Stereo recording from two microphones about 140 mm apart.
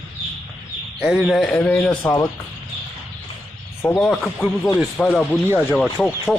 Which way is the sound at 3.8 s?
15° left (ahead or behind).